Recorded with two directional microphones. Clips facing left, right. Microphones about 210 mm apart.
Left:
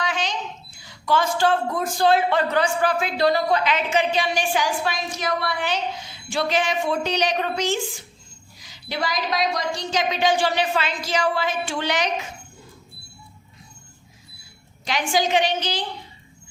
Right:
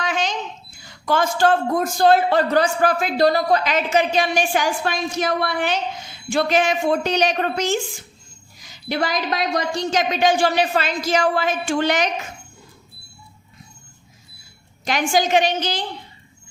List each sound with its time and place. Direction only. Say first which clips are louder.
0.0 s a sound: right 3 dB; 45° right (ahead or behind)
0.8 s a man's voice: right 2 dB; 50° right (ahead or behind)
14.8 s a man's voice: right 3 dB; 45° right (ahead or behind)